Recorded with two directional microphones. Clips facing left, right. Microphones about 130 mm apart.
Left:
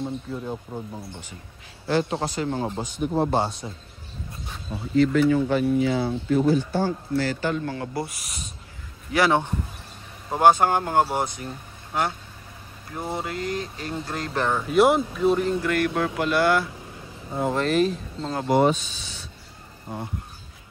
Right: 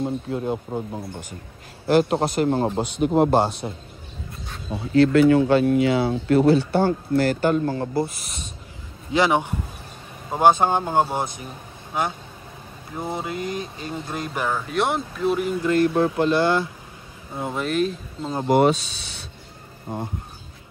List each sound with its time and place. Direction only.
0.0 s speech: 60° right (ahead or behind)
1.9 s a man's voice: 55° right (ahead or behind)
3.0 s speech: 90° right
3.3 s speech: 60° right (ahead or behind)
4.9 s speech: 75° right (ahead or behind); by 7.7 s 45° right (ahead or behind)
7.7 s speech: 30° right (ahead or behind)
9.1 s a man's voice: 15° right (ahead or behind)
14.4 s speech: centre (ahead or behind)
15.6 s speech: 25° right (ahead or behind)
17.4 s speech: centre (ahead or behind)
18.5 s speech: 75° right (ahead or behind)